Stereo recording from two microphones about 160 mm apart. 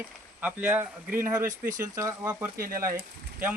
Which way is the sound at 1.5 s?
55° right (ahead or behind).